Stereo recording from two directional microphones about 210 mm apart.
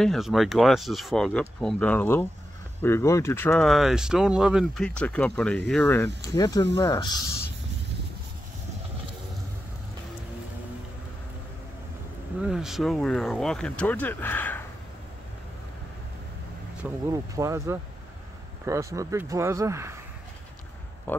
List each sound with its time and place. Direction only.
0.0 s speech: centre (ahead or behind); by 7.2 s 20° left (ahead or behind)
12.4 s speech: centre (ahead or behind)
17.1 s speech: 15° right (ahead or behind)
21.1 s speech: 10° left (ahead or behind)